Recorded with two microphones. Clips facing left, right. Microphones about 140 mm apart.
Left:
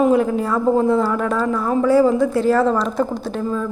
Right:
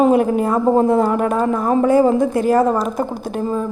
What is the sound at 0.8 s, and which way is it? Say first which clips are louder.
Speech: right 2 dB; 50° right (ahead or behind).